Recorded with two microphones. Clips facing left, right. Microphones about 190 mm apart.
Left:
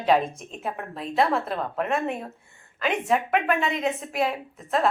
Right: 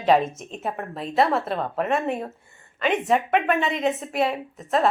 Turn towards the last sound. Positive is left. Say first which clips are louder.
# right 2 dB
turn(degrees=0)  # may be behind; listen again after turning